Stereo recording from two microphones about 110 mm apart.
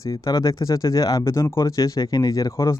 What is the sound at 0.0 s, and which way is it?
Speech, 35° left (ahead or behind).